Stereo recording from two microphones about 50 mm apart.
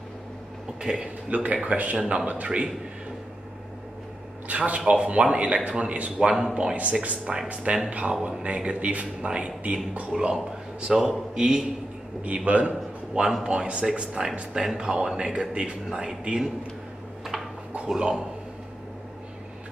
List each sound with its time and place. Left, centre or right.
0.7 s a man's voice: centre
1.3 s speech: right
4.5 s speech: right
10.1 s a man's voice: centre
12.3 s a man's voice: right
17.8 s a man's voice: centre